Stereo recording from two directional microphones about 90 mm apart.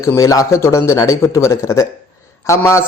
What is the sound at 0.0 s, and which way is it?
A man's voice, 35° left (ahead or behind).